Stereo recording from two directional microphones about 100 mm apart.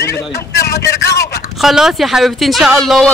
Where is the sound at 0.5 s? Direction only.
30° left (ahead or behind).